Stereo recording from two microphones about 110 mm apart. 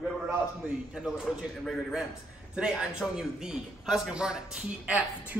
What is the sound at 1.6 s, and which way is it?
A man's voice, centre (ahead or behind).